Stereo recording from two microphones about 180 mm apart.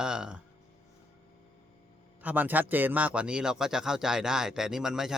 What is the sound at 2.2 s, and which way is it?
Speech, 10° right (ahead or behind).